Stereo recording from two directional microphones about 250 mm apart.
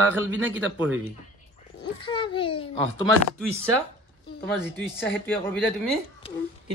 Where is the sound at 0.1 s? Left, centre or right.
Centre.